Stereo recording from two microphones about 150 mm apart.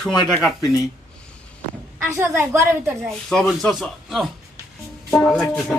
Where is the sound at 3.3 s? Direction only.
5° left (ahead or behind).